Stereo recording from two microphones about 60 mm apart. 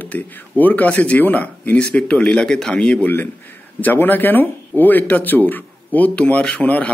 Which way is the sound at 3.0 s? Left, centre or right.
Left.